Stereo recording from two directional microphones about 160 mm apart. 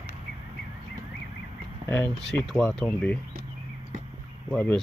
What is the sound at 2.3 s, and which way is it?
Speech, centre (ahead or behind).